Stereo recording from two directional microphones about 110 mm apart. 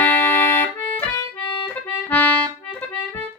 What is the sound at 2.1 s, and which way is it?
Accordion, 15° left (ahead or behind).